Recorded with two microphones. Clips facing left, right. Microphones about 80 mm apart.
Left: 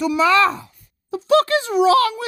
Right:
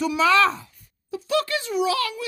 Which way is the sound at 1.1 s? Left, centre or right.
Left.